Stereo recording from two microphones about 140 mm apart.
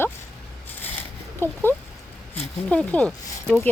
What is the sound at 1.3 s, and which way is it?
Speech, 15° left (ahead or behind).